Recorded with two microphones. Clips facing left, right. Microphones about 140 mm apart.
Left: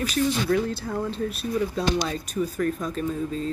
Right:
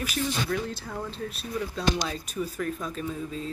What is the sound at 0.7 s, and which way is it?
Speech, 5° left (ahead or behind).